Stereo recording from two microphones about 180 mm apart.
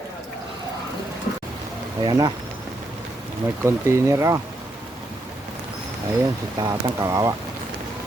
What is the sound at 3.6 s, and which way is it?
Speech, 15° right (ahead or behind).